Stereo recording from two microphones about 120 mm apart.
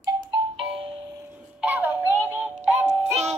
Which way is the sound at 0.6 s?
55° right (ahead or behind).